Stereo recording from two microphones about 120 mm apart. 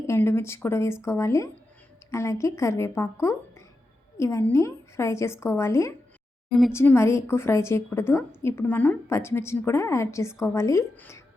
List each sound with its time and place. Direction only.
0.1 s a woman's voice: 20° left (ahead or behind)